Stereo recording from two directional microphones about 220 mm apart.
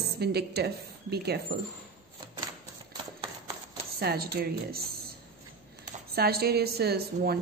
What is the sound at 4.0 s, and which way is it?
Speech, 45° right (ahead or behind).